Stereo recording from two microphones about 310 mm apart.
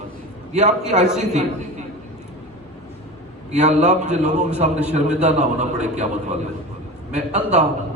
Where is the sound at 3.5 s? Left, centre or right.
Right.